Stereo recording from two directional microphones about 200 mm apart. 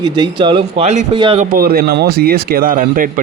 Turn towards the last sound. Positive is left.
turn(degrees=-45)  # may be behind; listen again after turning